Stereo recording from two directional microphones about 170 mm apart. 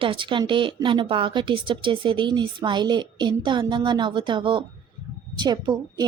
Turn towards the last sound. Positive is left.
turn(degrees=-25)  # may be behind; listen again after turning